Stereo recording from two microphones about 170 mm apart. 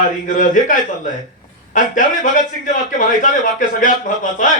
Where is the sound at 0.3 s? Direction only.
50° left (ahead or behind).